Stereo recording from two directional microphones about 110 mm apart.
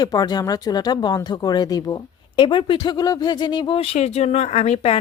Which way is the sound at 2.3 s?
45° left (ahead or behind).